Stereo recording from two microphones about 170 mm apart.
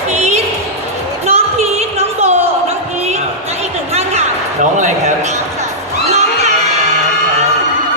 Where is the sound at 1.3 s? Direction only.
35° right (ahead or behind).